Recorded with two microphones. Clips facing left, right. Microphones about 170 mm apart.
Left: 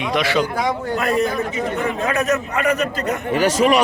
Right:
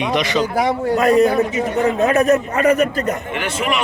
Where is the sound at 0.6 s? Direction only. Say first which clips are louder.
Right 5 dB; 35° right (ahead or behind).